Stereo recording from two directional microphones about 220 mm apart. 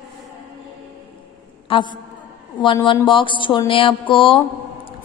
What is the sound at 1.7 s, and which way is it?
Mantra, 20° left (ahead or behind).